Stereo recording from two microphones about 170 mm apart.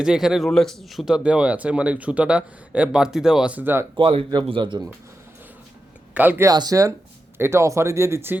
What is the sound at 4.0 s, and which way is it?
Speech, 30° right (ahead or behind).